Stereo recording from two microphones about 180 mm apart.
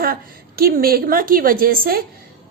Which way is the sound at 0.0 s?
55° right (ahead or behind).